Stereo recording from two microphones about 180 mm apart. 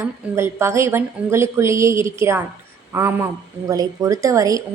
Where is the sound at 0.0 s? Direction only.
15° right (ahead or behind).